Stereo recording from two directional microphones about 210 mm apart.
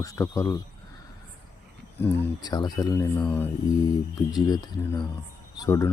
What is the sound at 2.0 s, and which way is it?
Speech, 10° left (ahead or behind).